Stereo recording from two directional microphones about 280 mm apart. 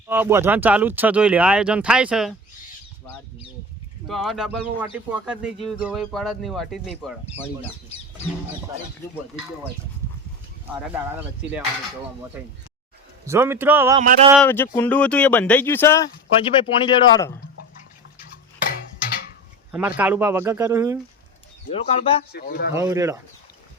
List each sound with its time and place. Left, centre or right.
0.1 s speech: centre
4.0 s speech: centre
10.7 s speech: centre
12.4 s speech: centre
14.0 s speech: right
14.3 s speech: centre
16.4 s speech: centre
19.7 s speech: centre
21.7 s speech: left
22.3 s speech: left
22.7 s speech: centre